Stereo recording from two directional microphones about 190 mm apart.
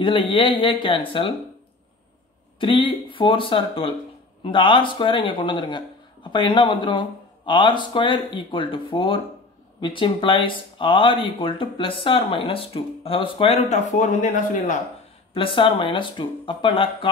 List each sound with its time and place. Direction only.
0.0 s speech: 25° left (ahead or behind)
2.6 s speech: 25° left (ahead or behind)
15.3 s speech: 25° left (ahead or behind)